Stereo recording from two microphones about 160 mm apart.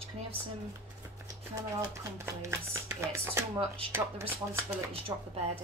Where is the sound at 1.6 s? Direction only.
20° right (ahead or behind).